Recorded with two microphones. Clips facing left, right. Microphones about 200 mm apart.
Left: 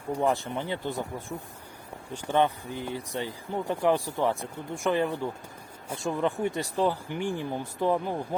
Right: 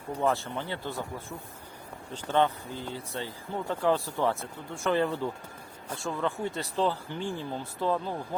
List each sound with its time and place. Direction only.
0.1 s speech: 15° left (ahead or behind)